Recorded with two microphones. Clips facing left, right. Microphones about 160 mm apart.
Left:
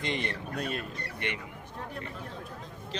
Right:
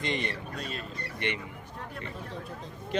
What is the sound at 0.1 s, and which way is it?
Speech, 60° left (ahead or behind).